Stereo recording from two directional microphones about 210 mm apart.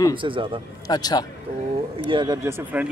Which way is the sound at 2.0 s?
20° right (ahead or behind).